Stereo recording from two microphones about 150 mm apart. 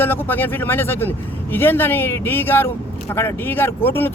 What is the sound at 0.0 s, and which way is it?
Speech, 15° left (ahead or behind).